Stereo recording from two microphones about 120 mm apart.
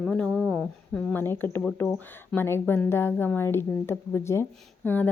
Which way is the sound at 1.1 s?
20° left (ahead or behind).